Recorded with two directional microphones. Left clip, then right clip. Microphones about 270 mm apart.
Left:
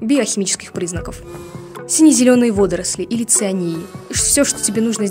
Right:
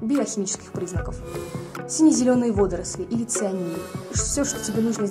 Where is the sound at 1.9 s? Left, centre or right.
Left.